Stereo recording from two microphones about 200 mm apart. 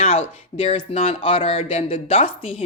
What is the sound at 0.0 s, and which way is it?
Speech, 30° left (ahead or behind).